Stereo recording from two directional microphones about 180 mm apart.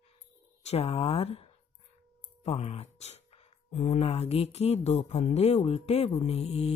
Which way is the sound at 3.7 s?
35° left (ahead or behind).